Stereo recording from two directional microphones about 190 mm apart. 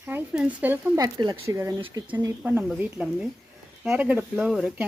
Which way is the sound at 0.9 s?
20° right (ahead or behind).